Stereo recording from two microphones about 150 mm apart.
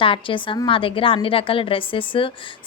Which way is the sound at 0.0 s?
35° left (ahead or behind).